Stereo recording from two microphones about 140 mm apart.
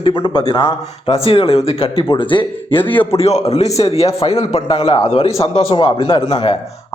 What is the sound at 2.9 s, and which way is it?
Speech, 10° left (ahead or behind).